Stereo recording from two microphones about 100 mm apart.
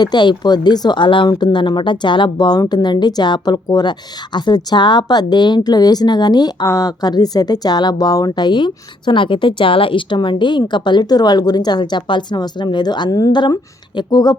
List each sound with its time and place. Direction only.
0.0 s a woman's voice: 50° left (ahead or behind)